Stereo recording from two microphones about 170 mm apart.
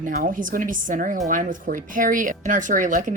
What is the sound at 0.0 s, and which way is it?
Speech, 55° right (ahead or behind).